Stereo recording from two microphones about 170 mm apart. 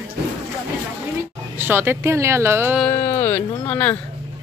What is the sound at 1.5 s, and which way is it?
Speech, 10° right (ahead or behind).